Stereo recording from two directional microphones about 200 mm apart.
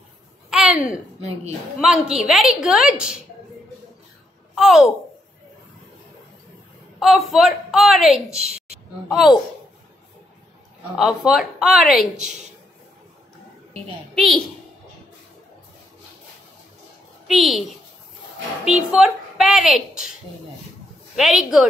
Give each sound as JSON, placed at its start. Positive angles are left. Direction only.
{"t": 0.5, "sound": "a sound", "side_deg": 0}
{"t": 1.8, "sound": "speech", "side_deg": -5}
{"t": 4.6, "sound": "speech", "side_deg": 0}
{"t": 7.0, "sound": "speech", "side_deg": 0}
{"t": 8.4, "sound": "a woman's voice", "side_deg": -30}
{"t": 9.1, "sound": "speech", "side_deg": 0}
{"t": 10.8, "sound": "speech", "side_deg": 0}
{"t": 14.1, "sound": "speech", "side_deg": 0}
{"t": 17.3, "sound": "speech", "side_deg": 0}
{"t": 18.7, "sound": "a woman's voice", "side_deg": -5}
{"t": 21.2, "sound": "speech", "side_deg": 0}